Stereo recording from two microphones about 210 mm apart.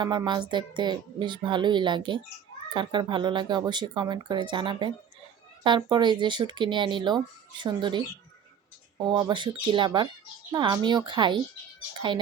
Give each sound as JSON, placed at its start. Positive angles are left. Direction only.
{"t": 0.0, "sound": "speech", "side_deg": -20}
{"t": 9.0, "sound": "speech", "side_deg": -20}